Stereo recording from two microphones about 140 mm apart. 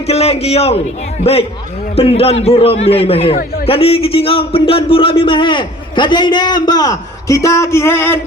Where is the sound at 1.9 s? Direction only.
45° left (ahead or behind).